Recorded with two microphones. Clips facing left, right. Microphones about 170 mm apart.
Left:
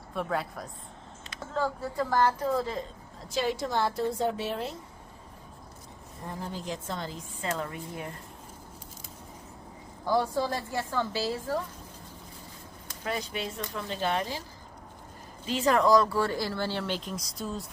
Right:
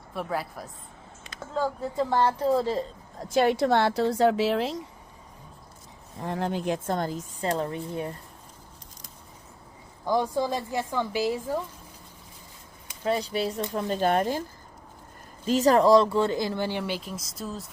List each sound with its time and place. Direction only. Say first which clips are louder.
0.1 s a woman's voice: even; 5° right (ahead or behind)
1.5 s a woman's voice: right 3 dB; 15° right (ahead or behind)
3.2 s a woman's voice: right 8 dB; 55° right (ahead or behind); by 4.8 s 90° right
6.1 s speech: right 8 dB; 85° right; by 7.3 s 50° right (ahead or behind)
7.4 s a woman's voice: right 5 dB; 30° right (ahead or behind)
10.1 s speech: right 2 dB; 15° right (ahead or behind)
13.1 s a woman's voice: right 7 dB; 30° right (ahead or behind)
13.7 s speech: right 6 dB; 45° right (ahead or behind)
15.4 s speech: right 5 dB; 40° right (ahead or behind); by 17.7 s centre (ahead or behind)